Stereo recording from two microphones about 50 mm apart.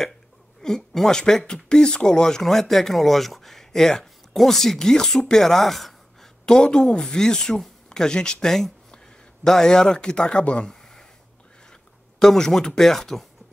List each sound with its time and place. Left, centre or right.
0.6 s speech: centre
6.4 s speech: centre
10.7 s a sound: centre
11.6 s speech: centre